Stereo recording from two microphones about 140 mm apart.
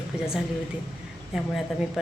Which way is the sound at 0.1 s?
5° right (ahead or behind).